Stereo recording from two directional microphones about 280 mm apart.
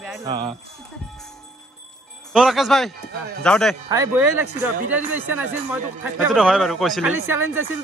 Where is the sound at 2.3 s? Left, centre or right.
Centre.